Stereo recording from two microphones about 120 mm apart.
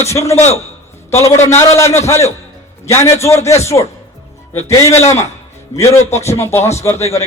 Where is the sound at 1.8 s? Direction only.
25° left (ahead or behind).